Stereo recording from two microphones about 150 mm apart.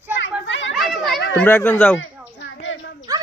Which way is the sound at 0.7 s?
Centre (ahead or behind).